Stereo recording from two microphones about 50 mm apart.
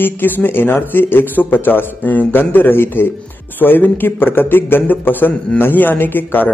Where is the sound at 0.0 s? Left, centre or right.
Left.